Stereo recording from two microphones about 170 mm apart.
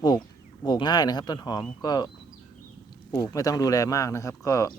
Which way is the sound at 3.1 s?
20° left (ahead or behind).